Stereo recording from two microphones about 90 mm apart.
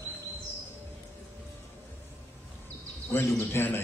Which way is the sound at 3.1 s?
30° left (ahead or behind).